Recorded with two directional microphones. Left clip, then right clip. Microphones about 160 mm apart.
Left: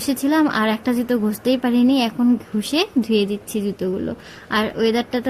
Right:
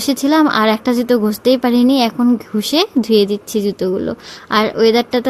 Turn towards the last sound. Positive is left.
turn(degrees=-30)  # may be behind; listen again after turning